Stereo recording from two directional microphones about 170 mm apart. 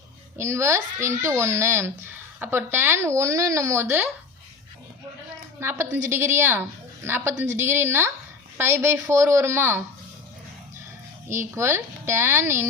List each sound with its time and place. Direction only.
0.3 s a child's voice: 15° right (ahead or behind)
5.5 s a child's voice: 15° right (ahead or behind)
11.3 s a child's voice: 15° right (ahead or behind)